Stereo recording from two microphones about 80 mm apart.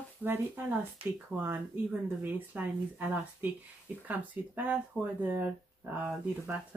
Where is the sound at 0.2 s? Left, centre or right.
Right.